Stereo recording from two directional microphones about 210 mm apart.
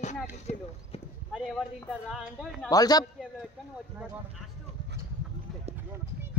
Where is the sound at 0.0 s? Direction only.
30° left (ahead or behind).